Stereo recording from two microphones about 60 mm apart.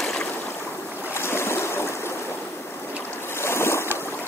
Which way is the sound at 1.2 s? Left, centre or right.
Left.